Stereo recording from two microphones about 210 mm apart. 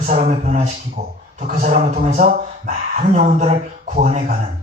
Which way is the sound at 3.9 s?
35° right (ahead or behind).